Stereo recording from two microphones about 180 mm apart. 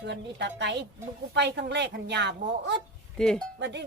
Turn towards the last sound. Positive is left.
turn(degrees=-75)  # may be behind; listen again after turning